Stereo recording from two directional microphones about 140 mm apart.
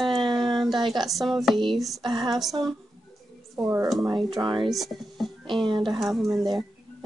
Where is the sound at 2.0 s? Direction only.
30° right (ahead or behind).